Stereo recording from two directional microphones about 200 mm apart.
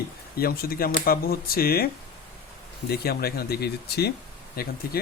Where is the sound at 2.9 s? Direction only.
50° left (ahead or behind).